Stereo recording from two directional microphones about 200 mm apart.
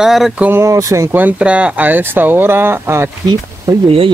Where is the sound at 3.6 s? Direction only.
25° right (ahead or behind).